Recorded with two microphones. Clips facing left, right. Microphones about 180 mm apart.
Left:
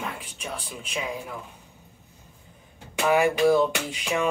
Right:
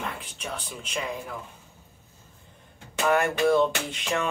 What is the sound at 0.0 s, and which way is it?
Speech, 5° left (ahead or behind).